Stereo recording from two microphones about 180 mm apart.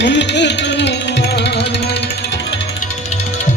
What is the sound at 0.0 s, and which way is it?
Music, 75° left (ahead or behind).